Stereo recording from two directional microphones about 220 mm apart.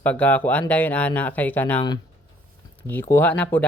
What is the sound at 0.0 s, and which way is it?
Speech, 5° left (ahead or behind).